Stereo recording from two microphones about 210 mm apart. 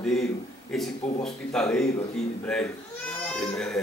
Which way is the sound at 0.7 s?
Centre (ahead or behind).